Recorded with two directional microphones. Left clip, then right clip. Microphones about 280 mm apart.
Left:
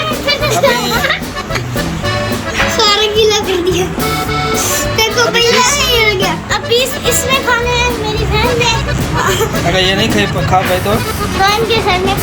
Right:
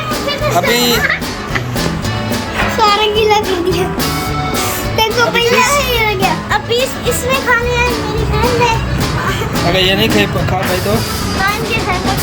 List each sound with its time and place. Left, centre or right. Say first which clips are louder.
0.7 s speech: right 1 dB; centre
2.7 s music: even; right
4.9 s music: even; right
6.5 s music: left 2 dB; centre
7.3 s speech: right 1 dB; centre
9.7 s speech: right 1 dB; centre